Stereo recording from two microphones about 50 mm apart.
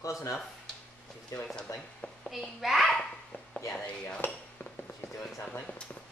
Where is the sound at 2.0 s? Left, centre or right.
Left.